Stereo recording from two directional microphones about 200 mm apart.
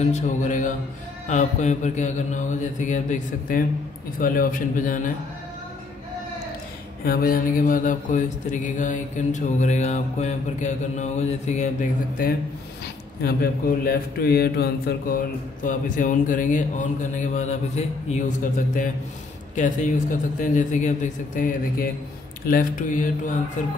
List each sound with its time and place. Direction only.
0.0 s speech: 35° left (ahead or behind)
7.1 s speech: 45° left (ahead or behind)